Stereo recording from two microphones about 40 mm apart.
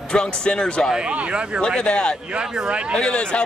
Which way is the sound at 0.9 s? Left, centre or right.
Right.